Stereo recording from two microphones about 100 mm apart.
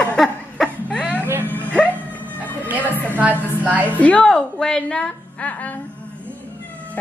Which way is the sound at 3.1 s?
15° right (ahead or behind).